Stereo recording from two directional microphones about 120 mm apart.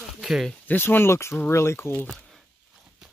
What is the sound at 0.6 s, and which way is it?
Speech, 15° left (ahead or behind).